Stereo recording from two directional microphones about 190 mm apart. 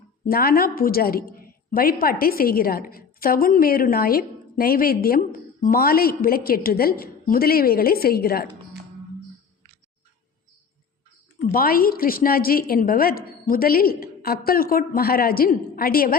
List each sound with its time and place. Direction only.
0.3 s a woman's voice: 50° left (ahead or behind)
11.4 s a woman's voice: 50° left (ahead or behind)